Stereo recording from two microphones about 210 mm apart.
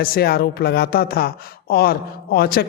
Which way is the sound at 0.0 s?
45° left (ahead or behind).